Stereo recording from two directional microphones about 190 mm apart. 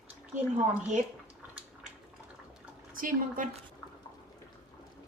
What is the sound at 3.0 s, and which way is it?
Speech, 45° right (ahead or behind).